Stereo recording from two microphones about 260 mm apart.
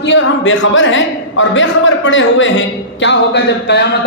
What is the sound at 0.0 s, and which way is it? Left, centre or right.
A man's voice, left.